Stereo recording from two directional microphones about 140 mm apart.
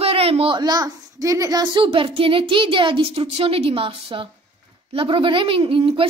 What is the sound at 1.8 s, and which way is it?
A woman's voice, 45° right (ahead or behind).